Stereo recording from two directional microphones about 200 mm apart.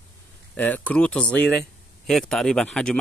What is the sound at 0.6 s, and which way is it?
Speech, 10° left (ahead or behind).